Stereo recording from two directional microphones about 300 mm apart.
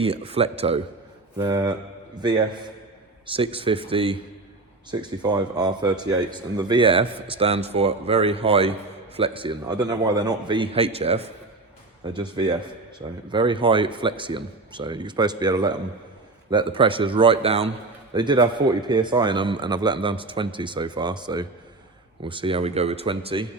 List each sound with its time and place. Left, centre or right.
0.0 s a man's voice: centre